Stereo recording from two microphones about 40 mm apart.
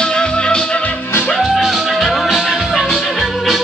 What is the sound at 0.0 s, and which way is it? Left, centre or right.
Music, left.